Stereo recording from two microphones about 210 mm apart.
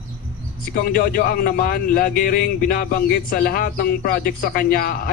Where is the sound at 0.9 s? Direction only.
40° left (ahead or behind).